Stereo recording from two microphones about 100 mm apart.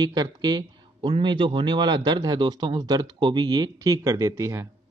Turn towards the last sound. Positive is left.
turn(degrees=-30)  # may be behind; listen again after turning